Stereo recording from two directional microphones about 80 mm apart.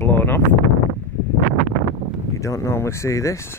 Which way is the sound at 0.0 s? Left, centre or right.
Left.